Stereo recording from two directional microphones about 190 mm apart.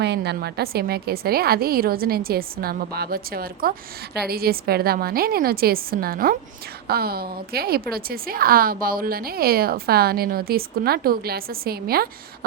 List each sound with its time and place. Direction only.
0.0 s a woman's voice: 60° right (ahead or behind)